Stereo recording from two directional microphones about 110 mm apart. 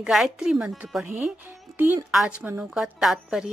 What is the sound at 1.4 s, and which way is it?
Speech, 20° right (ahead or behind).